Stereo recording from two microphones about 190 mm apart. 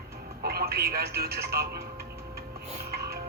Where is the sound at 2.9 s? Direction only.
55° right (ahead or behind).